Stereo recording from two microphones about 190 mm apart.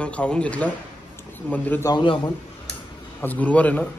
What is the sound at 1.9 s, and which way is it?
Speech, 25° left (ahead or behind).